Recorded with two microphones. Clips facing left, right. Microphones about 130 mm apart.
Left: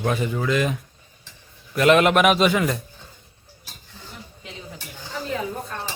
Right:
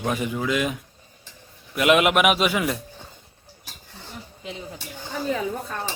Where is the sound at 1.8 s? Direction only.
10° right (ahead or behind).